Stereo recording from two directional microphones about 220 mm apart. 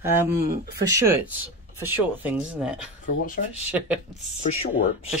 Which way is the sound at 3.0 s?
35° left (ahead or behind).